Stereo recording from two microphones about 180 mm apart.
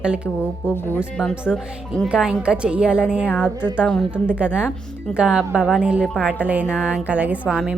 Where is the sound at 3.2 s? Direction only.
10° left (ahead or behind).